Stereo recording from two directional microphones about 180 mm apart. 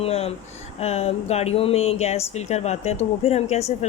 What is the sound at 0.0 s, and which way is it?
Speech, 35° left (ahead or behind).